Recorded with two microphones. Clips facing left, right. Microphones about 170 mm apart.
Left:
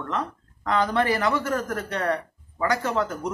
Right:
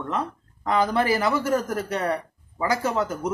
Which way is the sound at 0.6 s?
5° right (ahead or behind).